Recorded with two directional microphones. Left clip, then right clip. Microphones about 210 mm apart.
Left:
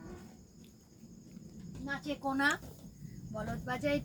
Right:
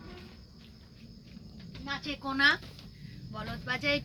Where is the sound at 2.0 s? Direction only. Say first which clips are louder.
Right 6 dB; 25° left (ahead or behind).